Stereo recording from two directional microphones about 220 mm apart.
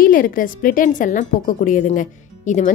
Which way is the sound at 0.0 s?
40° left (ahead or behind).